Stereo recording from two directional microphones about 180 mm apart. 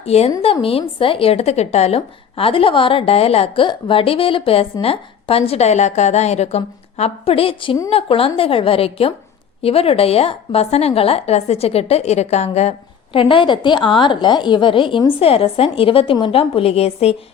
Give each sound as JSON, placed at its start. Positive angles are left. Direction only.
{"t": 0.0, "sound": "a woman's voice", "side_deg": 35}